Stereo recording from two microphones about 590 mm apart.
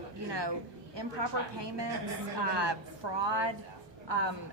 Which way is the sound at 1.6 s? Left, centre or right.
Right.